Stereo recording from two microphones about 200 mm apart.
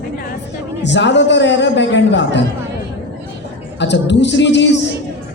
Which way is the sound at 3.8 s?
60° left (ahead or behind).